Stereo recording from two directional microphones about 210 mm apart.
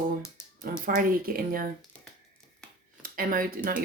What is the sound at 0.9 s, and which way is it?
Speech, 45° right (ahead or behind).